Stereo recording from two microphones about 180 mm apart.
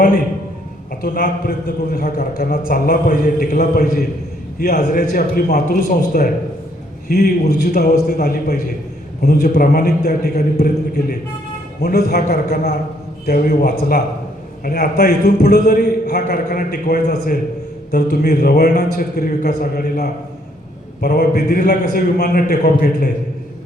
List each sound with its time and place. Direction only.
1.0 s a man's voice: 55° left (ahead or behind)
4.9 s a man's voice: 55° left (ahead or behind)